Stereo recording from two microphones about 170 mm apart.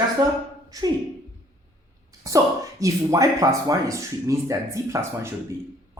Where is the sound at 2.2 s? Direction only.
20° right (ahead or behind).